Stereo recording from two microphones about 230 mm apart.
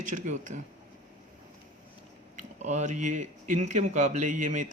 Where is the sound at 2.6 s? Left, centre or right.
Right.